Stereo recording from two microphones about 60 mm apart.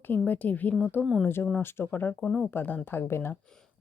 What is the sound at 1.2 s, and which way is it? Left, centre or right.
Speech, left.